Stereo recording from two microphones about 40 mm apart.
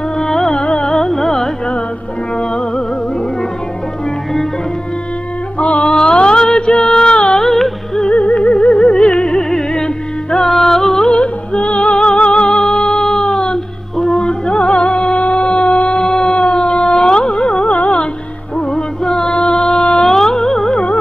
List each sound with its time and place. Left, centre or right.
0.2 s music: centre
0.9 s carnatic music: centre
5.6 s a sound: left
7.2 s music: centre
8.0 s music: left; by 11.1 s centre
11.1 s music: left
18.7 s music: centre